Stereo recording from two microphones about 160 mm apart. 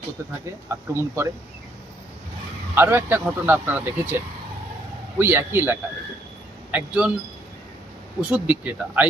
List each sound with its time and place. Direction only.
0.7 s speech: 15° right (ahead or behind)
2.7 s speech: 15° right (ahead or behind)
8.2 s speech: 10° right (ahead or behind)